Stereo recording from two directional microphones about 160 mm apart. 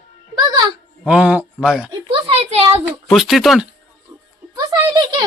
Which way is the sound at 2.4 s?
40° right (ahead or behind).